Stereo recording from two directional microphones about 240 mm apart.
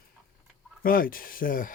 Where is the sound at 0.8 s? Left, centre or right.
Left.